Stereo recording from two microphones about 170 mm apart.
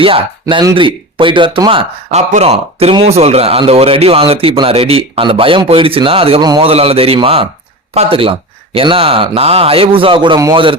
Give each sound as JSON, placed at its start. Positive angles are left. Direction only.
{"t": 0.0, "sound": "speech", "side_deg": -30}